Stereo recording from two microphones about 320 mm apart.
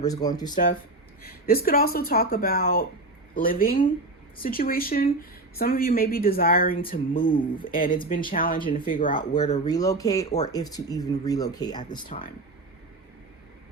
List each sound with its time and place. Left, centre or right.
0.0 s speech: centre
1.2 s speech: left
7.1 s speech: centre
12.0 s speech: left